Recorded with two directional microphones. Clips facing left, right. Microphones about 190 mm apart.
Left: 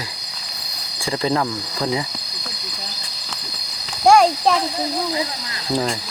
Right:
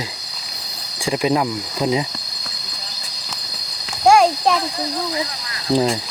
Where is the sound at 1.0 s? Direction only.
15° right (ahead or behind).